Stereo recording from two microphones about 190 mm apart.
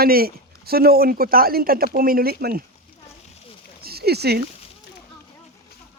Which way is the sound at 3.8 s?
55° right (ahead or behind).